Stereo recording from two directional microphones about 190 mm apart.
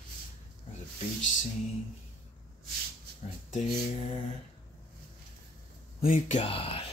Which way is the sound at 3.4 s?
35° left (ahead or behind).